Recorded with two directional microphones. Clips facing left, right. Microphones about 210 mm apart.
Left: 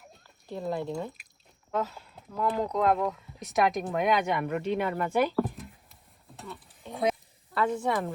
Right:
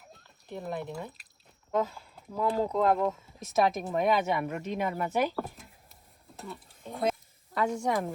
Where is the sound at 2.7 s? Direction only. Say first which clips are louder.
Even; centre (ahead or behind).